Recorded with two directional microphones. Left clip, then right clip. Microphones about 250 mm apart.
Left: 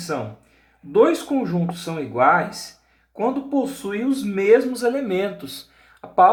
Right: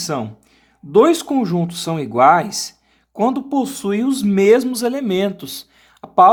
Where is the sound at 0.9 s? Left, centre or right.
Right.